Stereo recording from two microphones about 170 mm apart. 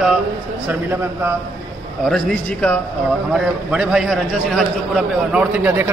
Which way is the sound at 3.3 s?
5° right (ahead or behind).